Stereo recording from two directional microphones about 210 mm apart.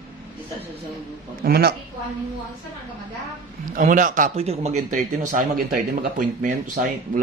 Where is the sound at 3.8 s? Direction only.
40° right (ahead or behind).